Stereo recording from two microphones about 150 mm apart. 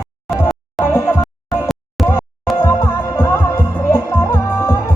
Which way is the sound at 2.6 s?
20° left (ahead or behind).